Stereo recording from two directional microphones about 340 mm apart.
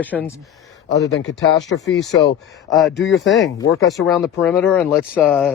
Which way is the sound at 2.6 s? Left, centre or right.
Centre.